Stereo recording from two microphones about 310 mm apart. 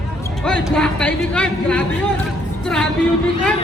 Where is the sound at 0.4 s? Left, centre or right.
Centre.